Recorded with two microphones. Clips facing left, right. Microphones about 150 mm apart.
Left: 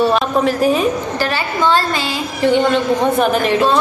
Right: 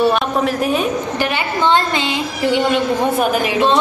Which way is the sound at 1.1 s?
15° right (ahead or behind).